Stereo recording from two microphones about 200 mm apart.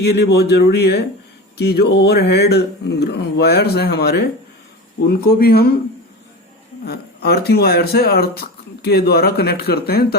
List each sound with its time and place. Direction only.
0.0 s speech: 55° left (ahead or behind)
6.8 s speech: 50° left (ahead or behind)